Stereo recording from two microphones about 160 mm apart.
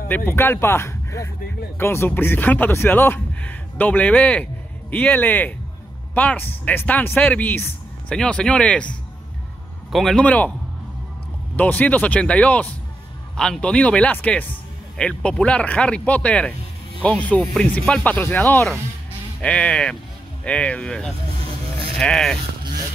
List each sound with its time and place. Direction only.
0.3 s speech: 15° left (ahead or behind)
9.9 s speech: 5° left (ahead or behind)
11.5 s speech: 10° left (ahead or behind)